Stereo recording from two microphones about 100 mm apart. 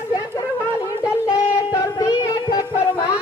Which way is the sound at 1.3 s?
35° left (ahead or behind).